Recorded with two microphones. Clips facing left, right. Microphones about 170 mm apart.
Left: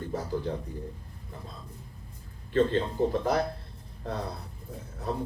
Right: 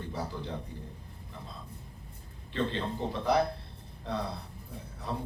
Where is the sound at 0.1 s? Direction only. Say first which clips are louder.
Left 3 dB; 45° left (ahead or behind).